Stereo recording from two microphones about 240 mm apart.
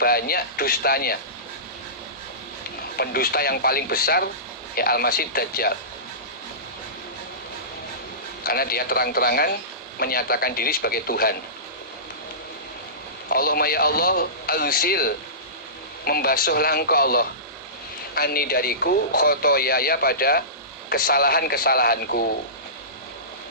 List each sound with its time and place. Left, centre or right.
0.0 s speech: left
3.0 s speech: left
8.4 s speech: left
13.2 s speech: left